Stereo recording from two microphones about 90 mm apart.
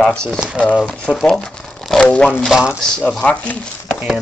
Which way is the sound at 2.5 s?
10° right (ahead or behind).